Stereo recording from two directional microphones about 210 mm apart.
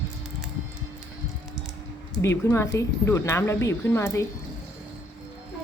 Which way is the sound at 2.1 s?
15° left (ahead or behind).